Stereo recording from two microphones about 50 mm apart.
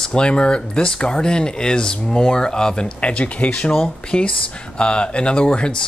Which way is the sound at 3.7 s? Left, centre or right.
Centre.